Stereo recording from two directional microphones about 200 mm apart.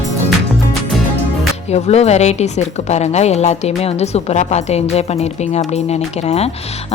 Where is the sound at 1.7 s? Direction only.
30° left (ahead or behind).